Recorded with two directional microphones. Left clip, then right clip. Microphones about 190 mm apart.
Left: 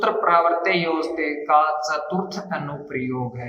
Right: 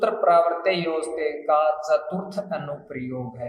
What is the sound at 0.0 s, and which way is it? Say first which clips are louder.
A man's voice: left 1 dB; 20° right (ahead or behind).